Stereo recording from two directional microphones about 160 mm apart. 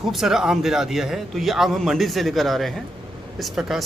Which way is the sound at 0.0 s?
Centre (ahead or behind).